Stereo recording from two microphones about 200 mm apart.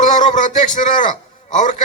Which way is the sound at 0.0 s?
40° left (ahead or behind).